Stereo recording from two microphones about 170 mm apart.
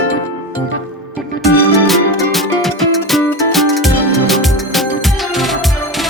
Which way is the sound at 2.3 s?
Centre (ahead or behind).